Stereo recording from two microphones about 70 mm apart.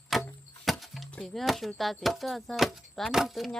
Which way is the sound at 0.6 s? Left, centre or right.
Centre.